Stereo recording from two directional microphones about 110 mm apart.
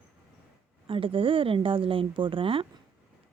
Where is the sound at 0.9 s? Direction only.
55° right (ahead or behind).